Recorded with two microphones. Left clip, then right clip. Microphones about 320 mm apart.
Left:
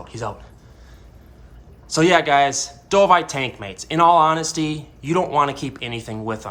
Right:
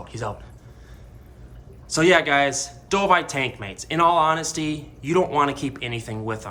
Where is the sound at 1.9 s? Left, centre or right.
Centre.